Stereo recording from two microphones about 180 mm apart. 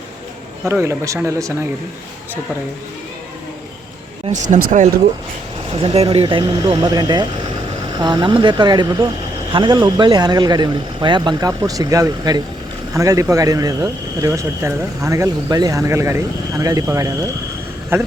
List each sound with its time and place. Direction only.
0.6 s speech: 15° right (ahead or behind)
4.3 s speech: 45° right (ahead or behind)
5.7 s speech: 30° right (ahead or behind); by 18.1 s 15° right (ahead or behind)